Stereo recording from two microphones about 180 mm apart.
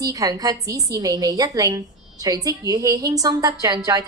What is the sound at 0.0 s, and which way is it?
A woman's voice, 20° right (ahead or behind).